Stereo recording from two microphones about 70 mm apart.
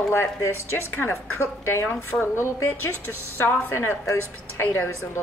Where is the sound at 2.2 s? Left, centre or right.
Left.